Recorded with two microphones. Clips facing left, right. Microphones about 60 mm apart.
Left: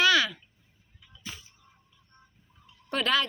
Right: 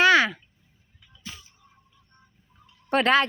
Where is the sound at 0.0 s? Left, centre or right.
Right.